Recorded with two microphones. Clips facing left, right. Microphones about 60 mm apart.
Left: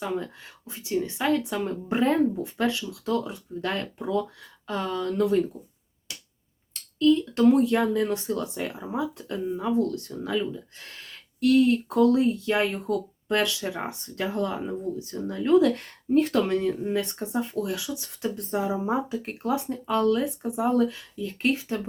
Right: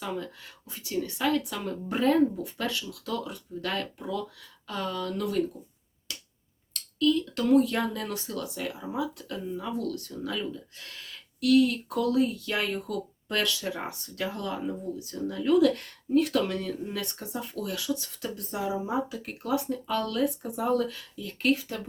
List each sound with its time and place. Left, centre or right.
0.7 s speech: left
6.7 s speech: left